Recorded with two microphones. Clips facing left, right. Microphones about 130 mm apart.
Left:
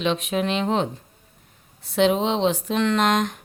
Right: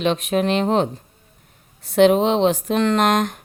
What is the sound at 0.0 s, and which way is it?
Speech, 45° right (ahead or behind).